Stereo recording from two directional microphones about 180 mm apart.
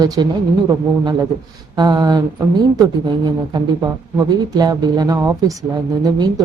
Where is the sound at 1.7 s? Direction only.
20° right (ahead or behind).